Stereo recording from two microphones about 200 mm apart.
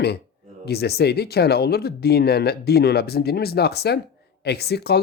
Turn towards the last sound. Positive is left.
turn(degrees=55)  # may be behind; listen again after turning